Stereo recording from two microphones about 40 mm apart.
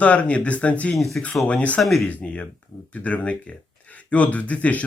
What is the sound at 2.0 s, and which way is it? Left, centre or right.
Speech, left.